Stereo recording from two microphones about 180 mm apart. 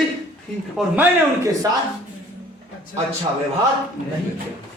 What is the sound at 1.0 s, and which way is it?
Speech, 15° right (ahead or behind).